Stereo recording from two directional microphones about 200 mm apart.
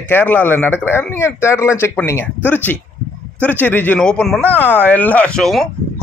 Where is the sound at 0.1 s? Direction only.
10° left (ahead or behind).